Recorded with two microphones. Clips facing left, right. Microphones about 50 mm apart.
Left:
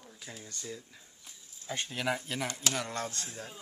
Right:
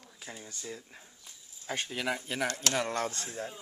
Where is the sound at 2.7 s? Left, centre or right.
Right.